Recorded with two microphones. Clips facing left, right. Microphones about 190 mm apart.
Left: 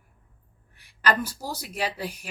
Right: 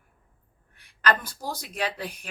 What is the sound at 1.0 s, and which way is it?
Speech, 10° left (ahead or behind).